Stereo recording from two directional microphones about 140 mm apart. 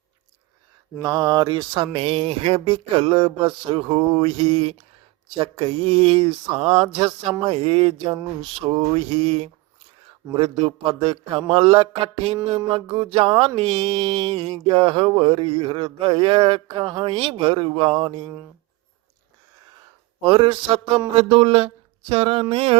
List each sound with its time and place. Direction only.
1.0 s speech: 30° right (ahead or behind)
8.4 s mantra: 40° right (ahead or behind)
10.3 s speech: 40° right (ahead or behind)
20.2 s speech: 35° right (ahead or behind)